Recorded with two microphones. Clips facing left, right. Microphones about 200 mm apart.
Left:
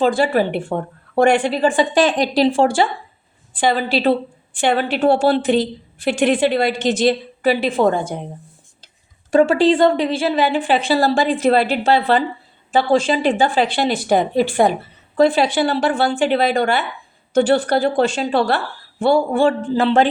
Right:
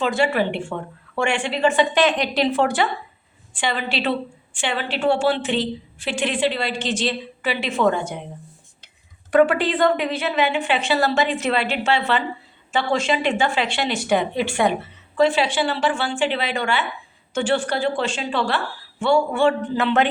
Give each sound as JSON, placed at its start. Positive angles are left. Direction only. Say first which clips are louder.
{"t": 0.0, "sound": "speech", "louder": "left 4 dB", "side_deg": 35}
{"t": 9.3, "sound": "speech", "louder": "left 4 dB", "side_deg": 25}